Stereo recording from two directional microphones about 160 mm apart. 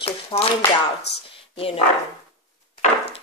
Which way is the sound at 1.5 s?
35° left (ahead or behind).